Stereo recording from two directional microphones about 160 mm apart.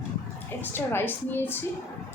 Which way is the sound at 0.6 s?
15° left (ahead or behind).